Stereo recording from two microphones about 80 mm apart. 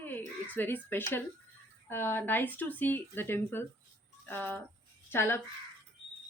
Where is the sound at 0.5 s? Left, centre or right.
Left.